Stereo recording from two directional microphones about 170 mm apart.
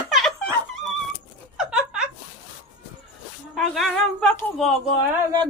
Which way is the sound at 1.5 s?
5° right (ahead or behind).